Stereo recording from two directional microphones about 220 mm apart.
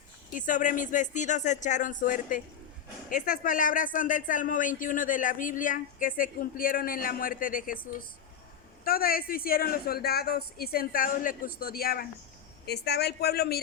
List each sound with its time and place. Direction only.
0.3 s speech: 35° left (ahead or behind)